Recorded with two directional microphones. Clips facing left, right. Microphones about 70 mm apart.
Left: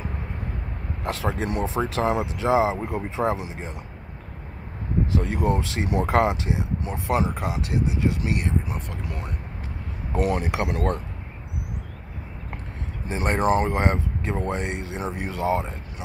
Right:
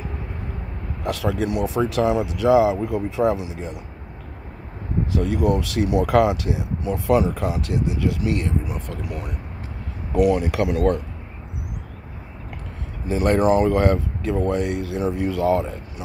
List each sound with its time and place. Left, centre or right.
1.0 s speech: left
5.1 s speech: left
10.1 s speech: left
13.1 s speech: left